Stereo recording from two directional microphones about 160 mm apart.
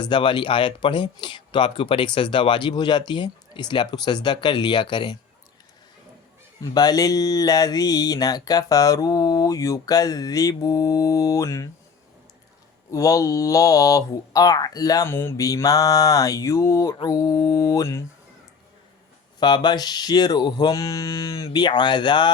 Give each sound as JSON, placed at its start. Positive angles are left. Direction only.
{"t": 0.0, "sound": "speech", "side_deg": 30}
{"t": 6.6, "sound": "speech", "side_deg": 25}
{"t": 12.9, "sound": "speech", "side_deg": 20}
{"t": 19.4, "sound": "speech", "side_deg": 30}